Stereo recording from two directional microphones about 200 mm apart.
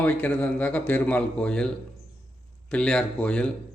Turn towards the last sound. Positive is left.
turn(degrees=5)  # may be behind; listen again after turning